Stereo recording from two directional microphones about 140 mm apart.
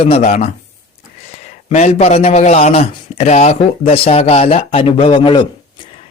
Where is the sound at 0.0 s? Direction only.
50° left (ahead or behind).